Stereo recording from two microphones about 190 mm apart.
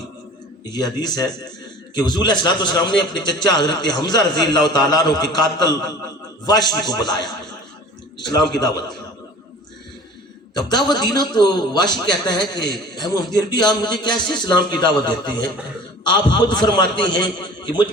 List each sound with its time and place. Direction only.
0.6 s a man's voice: 20° left (ahead or behind)
8.2 s a man's voice: 20° left (ahead or behind)
10.5 s a man's voice: 20° left (ahead or behind)